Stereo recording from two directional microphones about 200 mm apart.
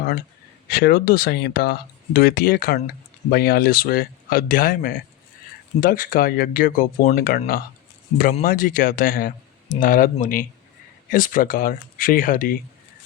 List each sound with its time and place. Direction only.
0.7 s speech: 50° left (ahead or behind)